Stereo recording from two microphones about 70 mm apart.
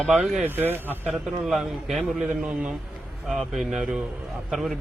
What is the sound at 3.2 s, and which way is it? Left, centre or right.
Speech, centre.